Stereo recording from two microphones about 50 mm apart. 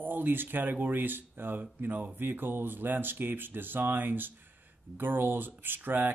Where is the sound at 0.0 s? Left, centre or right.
Right.